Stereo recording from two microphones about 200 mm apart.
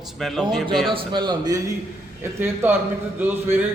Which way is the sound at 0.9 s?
25° right (ahead or behind).